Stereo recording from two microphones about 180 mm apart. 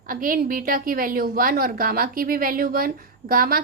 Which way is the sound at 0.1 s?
50° right (ahead or behind).